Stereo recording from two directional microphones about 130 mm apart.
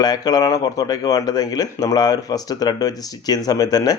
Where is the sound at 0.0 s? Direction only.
30° left (ahead or behind).